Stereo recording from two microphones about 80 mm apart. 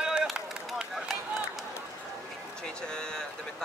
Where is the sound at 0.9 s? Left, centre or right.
Centre.